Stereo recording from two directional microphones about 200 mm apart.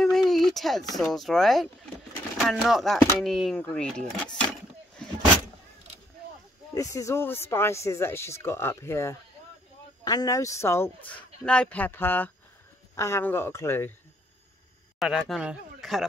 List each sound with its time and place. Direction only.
0.0 s a sound: centre (ahead or behind)
0.9 s speech: centre (ahead or behind)
6.7 s speech: 15° left (ahead or behind)
15.0 s speech: centre (ahead or behind)